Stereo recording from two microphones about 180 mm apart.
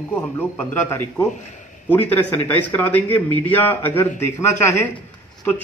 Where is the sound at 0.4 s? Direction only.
10° left (ahead or behind).